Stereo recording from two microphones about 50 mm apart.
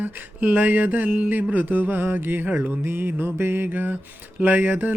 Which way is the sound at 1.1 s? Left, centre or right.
Right.